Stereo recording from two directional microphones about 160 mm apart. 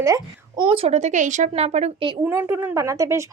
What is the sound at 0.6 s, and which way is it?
A child's voice, 35° right (ahead or behind).